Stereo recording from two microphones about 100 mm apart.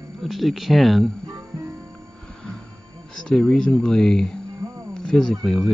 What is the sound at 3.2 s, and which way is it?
Speech, 5° left (ahead or behind).